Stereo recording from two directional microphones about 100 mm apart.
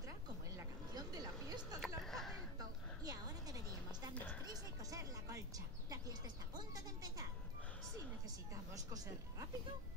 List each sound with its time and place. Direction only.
0.9 s music: 40° right (ahead or behind)
2.0 s a sound: centre (ahead or behind)
3.1 s music: 40° right (ahead or behind)
5.9 s bird: 40° right (ahead or behind)
8.7 s speech: 35° right (ahead or behind)